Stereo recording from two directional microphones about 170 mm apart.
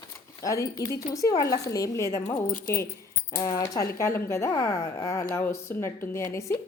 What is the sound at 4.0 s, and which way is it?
A woman's voice, 15° left (ahead or behind).